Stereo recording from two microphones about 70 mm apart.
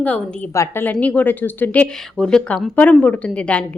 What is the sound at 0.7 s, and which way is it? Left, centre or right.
A woman's voice, left.